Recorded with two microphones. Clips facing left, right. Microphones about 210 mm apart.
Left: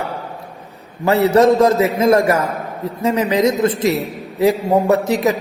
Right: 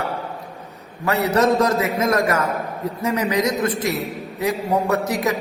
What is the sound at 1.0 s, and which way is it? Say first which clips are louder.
A man's voice: left 6 dB; 25° left (ahead or behind).